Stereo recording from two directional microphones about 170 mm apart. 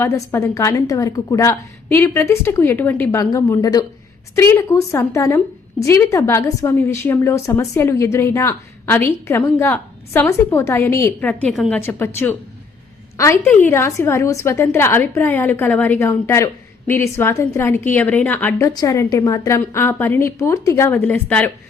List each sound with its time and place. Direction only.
0.0 s a woman's voice: 15° left (ahead or behind)
11.8 s a woman's voice: 15° left (ahead or behind)
13.1 s a woman's voice: 15° left (ahead or behind)